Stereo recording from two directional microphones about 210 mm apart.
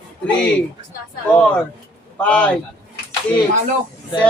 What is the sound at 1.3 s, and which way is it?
A man's voice, 5° left (ahead or behind).